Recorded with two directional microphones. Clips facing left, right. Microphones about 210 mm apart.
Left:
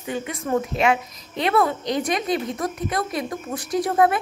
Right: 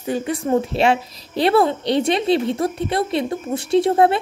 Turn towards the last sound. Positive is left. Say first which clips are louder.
# right 4 dB
turn(degrees=-30)  # may be behind; listen again after turning